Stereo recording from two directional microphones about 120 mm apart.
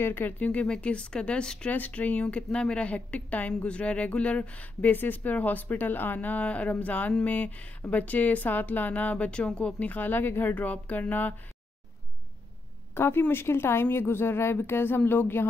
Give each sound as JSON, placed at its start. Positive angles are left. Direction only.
{"t": 0.0, "sound": "speech", "side_deg": 15}
{"t": 12.9, "sound": "a woman's voice", "side_deg": 20}